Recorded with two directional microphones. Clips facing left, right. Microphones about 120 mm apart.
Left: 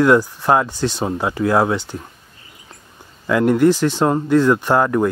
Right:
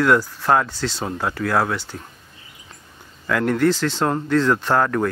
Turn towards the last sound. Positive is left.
turn(degrees=15)  # may be behind; listen again after turning